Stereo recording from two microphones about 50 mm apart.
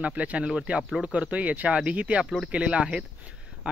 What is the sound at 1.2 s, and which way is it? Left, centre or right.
Speech, right.